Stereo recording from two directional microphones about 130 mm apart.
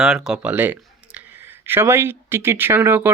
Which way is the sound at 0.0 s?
5° right (ahead or behind).